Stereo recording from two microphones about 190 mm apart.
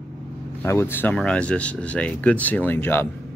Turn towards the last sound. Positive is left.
turn(degrees=10)  # may be behind; listen again after turning